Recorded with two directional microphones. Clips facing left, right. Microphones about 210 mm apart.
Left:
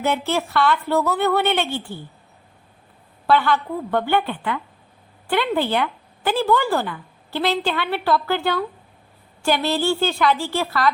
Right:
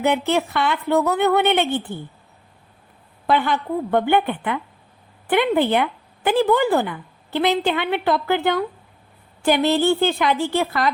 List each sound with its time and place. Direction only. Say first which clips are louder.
0.0 s speech: right 3 dB; 15° right (ahead or behind)
3.2 s a woman's voice: left 1 dB; 15° right (ahead or behind)